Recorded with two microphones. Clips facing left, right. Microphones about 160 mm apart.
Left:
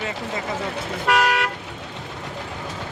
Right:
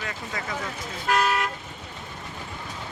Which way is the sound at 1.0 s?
75° left (ahead or behind).